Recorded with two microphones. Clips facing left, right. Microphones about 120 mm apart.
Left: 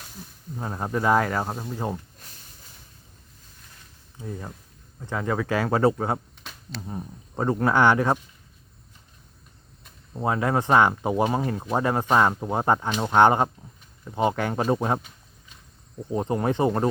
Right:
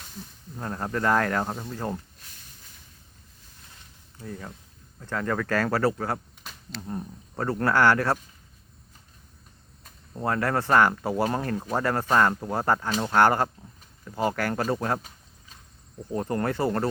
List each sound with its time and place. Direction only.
0.5 s speech: 10° left (ahead or behind)
4.2 s speech: 15° left (ahead or behind)
6.4 s a sound: centre (ahead or behind)
7.3 s speech: 15° left (ahead or behind)
10.2 s speech: 15° left (ahead or behind)
11.3 s speech: 5° left (ahead or behind)